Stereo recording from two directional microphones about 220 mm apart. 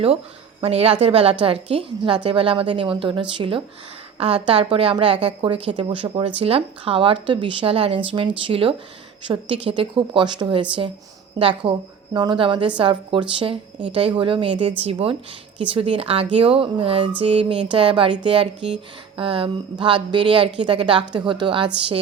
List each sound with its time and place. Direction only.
0.6 s speech: 25° right (ahead or behind)